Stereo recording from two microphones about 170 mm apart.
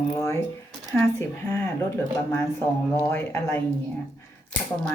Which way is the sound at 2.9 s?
10° left (ahead or behind).